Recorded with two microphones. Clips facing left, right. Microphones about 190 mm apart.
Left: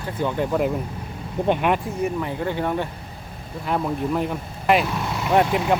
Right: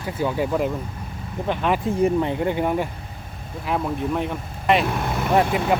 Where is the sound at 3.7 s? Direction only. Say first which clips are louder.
Left 1 dB; centre (ahead or behind).